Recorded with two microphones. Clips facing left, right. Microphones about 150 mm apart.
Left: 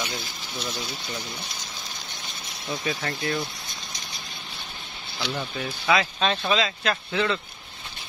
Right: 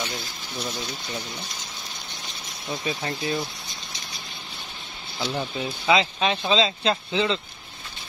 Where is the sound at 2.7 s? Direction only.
20° right (ahead or behind).